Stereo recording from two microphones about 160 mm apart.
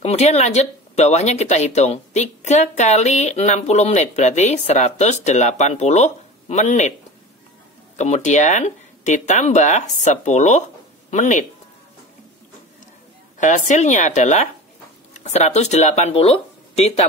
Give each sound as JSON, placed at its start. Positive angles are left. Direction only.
{"t": 0.0, "sound": "speech", "side_deg": 45}
{"t": 7.9, "sound": "speech", "side_deg": 45}
{"t": 13.4, "sound": "speech", "side_deg": 50}